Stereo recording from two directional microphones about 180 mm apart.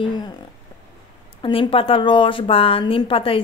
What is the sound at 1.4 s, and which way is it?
A woman's voice, 30° left (ahead or behind).